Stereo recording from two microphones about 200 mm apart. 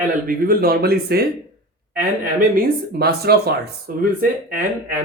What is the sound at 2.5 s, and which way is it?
Speech, 50° right (ahead or behind).